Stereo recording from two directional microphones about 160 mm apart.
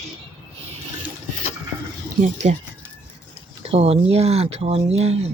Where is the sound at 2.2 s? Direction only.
45° right (ahead or behind).